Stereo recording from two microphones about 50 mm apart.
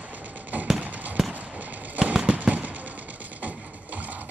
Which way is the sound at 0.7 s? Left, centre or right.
Right.